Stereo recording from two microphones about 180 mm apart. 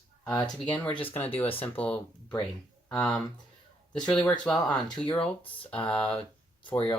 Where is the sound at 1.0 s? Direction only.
10° left (ahead or behind).